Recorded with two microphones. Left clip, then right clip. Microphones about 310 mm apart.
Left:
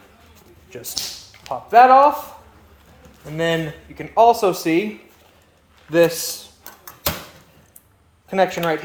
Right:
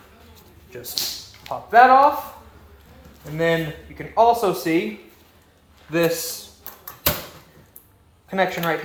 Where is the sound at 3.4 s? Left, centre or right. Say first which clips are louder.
Even; left.